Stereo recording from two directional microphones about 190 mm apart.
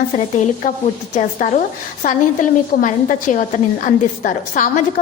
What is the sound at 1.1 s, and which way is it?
A woman's voice, 40° left (ahead or behind).